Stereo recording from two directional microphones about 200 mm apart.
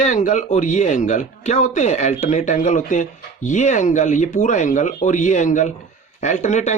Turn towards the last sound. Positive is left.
turn(degrees=35)  # may be behind; listen again after turning